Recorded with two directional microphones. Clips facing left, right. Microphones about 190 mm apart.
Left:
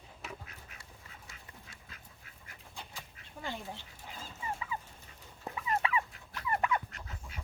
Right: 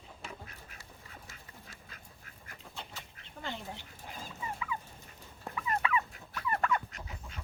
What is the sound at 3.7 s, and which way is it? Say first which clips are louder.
Dog: right 1 dB; 15° right (ahead or behind).